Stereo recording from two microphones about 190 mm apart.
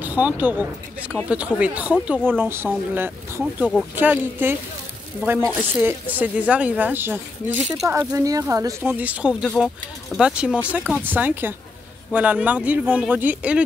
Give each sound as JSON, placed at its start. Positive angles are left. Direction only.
{"t": 0.0, "sound": "speech", "side_deg": -10}
{"t": 9.3, "sound": "speech", "side_deg": 5}